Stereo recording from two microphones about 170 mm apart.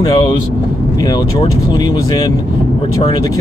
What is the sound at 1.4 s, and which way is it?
Speech, 25° left (ahead or behind).